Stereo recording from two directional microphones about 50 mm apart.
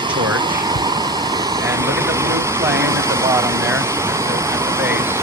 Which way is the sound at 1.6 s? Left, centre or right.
Right.